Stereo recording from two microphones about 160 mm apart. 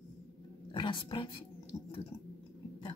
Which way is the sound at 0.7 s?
30° left (ahead or behind).